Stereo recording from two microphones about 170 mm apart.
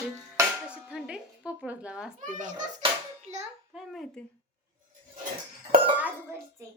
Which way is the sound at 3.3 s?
40° right (ahead or behind).